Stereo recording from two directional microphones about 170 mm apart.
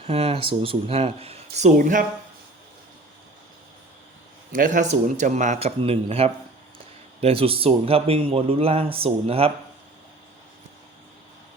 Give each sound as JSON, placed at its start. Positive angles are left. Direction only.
{"t": 0.0, "sound": "a man's voice", "side_deg": -35}
{"t": 1.5, "sound": "speech", "side_deg": -50}
{"t": 4.5, "sound": "a man's voice", "side_deg": -50}